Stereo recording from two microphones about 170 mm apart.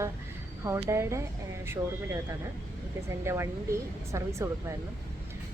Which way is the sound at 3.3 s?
15° right (ahead or behind).